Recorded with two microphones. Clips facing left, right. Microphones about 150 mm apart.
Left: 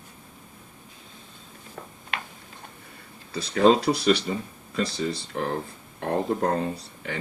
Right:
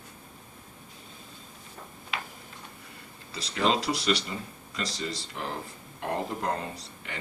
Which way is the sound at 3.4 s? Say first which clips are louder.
Left 8 dB; 55° left (ahead or behind).